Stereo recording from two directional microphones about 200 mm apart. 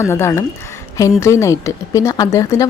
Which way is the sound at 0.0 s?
15° left (ahead or behind).